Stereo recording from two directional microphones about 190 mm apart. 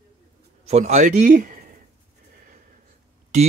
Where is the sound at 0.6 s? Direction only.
35° right (ahead or behind).